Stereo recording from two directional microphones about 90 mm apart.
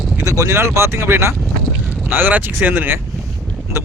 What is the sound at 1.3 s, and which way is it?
Honk, centre (ahead or behind).